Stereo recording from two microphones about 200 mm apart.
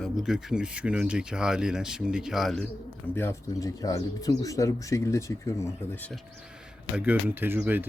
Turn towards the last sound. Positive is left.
turn(degrees=-10)  # may be behind; listen again after turning